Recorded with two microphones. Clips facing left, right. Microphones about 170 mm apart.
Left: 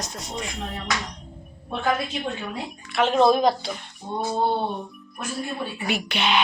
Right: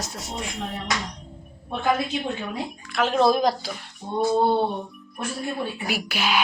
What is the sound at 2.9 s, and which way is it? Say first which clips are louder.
Speech: left 2 dB; centre (ahead or behind).